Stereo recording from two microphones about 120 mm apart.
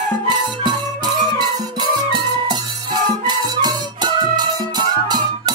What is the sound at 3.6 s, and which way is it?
Music, 35° right (ahead or behind).